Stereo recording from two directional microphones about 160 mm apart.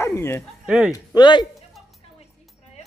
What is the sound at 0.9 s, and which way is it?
Speech, 25° left (ahead or behind).